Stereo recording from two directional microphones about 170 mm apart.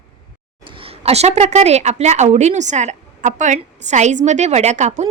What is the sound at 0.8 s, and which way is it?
A woman's voice, 35° right (ahead or behind).